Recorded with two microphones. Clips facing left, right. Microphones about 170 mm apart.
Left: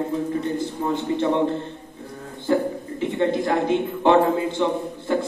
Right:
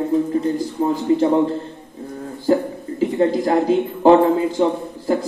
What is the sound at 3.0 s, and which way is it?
A man's voice, 35° right (ahead or behind).